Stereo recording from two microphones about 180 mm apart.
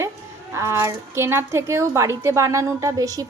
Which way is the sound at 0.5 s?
15° right (ahead or behind).